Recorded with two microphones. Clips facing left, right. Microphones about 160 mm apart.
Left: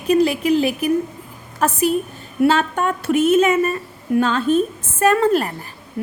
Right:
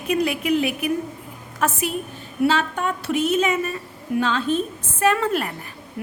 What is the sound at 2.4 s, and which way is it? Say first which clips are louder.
A woman's voice: left 4 dB; 50° left (ahead or behind).